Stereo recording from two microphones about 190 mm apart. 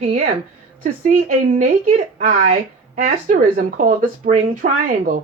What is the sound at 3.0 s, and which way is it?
A woman's voice, 45° right (ahead or behind).